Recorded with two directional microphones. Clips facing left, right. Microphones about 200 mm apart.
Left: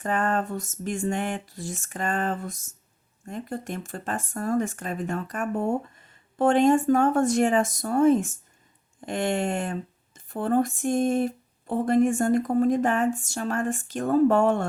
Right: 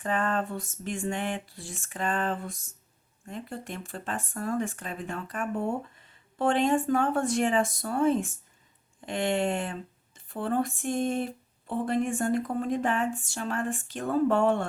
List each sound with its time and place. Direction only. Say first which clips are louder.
0.0 s speech: left 3 dB; 45° left (ahead or behind)